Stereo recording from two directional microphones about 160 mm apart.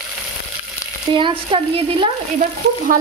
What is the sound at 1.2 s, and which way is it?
Speech, 30° right (ahead or behind).